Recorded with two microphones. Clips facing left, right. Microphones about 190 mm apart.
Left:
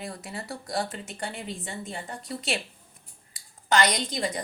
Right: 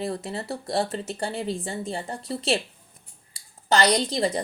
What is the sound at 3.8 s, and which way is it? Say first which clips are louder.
Speech: right 5 dB; 30° right (ahead or behind).